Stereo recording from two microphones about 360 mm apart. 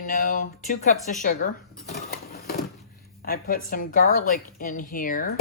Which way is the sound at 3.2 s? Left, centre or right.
Left.